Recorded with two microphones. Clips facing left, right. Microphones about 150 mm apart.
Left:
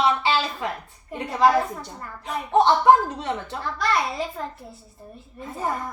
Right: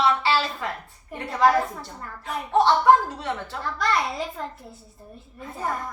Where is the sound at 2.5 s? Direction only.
20° left (ahead or behind).